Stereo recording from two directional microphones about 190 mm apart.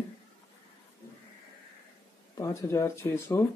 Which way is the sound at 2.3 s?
15° left (ahead or behind).